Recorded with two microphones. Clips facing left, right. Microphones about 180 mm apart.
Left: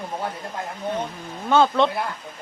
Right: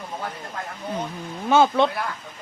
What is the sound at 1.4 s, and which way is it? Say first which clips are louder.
Speech: even; 5° right (ahead or behind).